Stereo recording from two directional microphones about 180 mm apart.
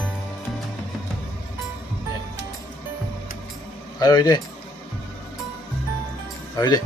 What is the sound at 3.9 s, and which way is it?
Speech, 25° left (ahead or behind).